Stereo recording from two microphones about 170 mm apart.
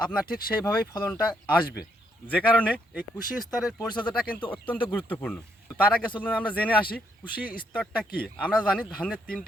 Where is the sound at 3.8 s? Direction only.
25° left (ahead or behind).